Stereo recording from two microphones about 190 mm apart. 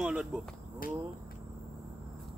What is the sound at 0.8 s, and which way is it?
Speech, 50° left (ahead or behind).